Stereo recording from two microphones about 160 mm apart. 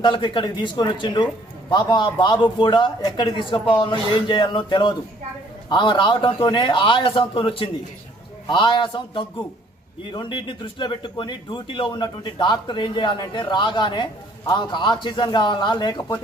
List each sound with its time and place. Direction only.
0.0 s a man's voice: 30° left (ahead or behind)